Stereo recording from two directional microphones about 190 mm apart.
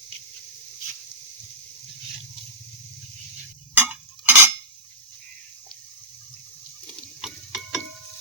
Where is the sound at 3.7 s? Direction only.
10° right (ahead or behind).